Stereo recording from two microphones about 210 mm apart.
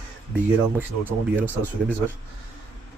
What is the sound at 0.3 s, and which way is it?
Speech, 10° right (ahead or behind).